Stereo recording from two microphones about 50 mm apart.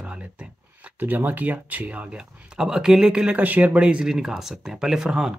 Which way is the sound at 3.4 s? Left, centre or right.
Right.